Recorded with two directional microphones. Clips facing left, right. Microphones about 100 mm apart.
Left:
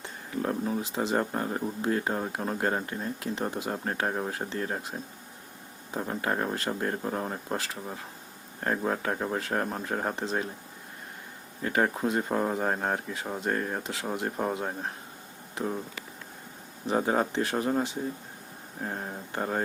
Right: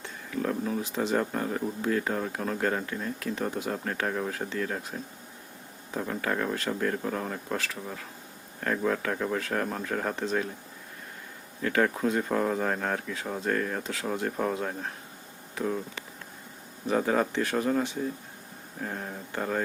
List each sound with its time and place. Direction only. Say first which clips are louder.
0.0 s speech: even; 35° left (ahead or behind)
4.8 s speech: even; 20° left (ahead or behind)
11.6 s speech: right 1 dB; 25° left (ahead or behind)
16.9 s speech: right 1 dB; 30° left (ahead or behind)